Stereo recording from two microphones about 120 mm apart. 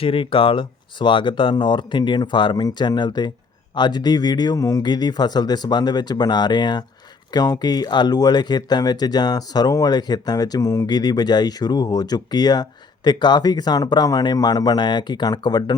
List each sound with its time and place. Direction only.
0.0 s speech: 50° left (ahead or behind)